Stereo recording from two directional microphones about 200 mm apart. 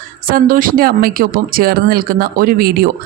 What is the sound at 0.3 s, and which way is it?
Speech, 45° right (ahead or behind).